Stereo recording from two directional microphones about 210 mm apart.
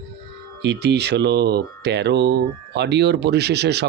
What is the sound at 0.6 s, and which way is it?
Speech, 55° right (ahead or behind).